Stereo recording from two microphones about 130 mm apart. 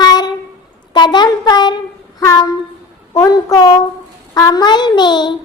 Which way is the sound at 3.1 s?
30° left (ahead or behind).